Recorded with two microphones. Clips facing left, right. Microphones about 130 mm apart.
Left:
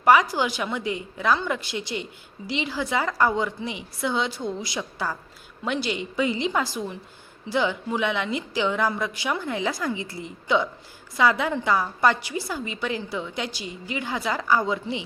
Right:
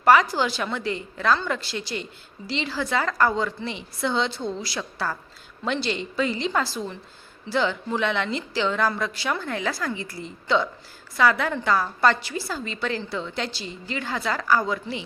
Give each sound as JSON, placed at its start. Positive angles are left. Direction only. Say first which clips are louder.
{"t": 0.0, "sound": "a woman's voice", "louder": "right 1 dB", "side_deg": 15}